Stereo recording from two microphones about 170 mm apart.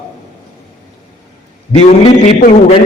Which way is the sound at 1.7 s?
40° left (ahead or behind).